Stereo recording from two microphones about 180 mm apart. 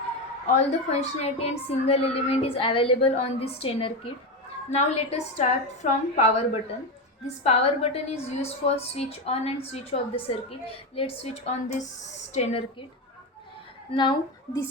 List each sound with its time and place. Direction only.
0.5 s a woman's voice: 35° left (ahead or behind)
13.9 s speech: 25° left (ahead or behind)